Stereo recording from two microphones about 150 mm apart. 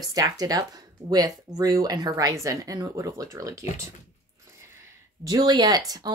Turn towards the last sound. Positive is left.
turn(degrees=-25)  # may be behind; listen again after turning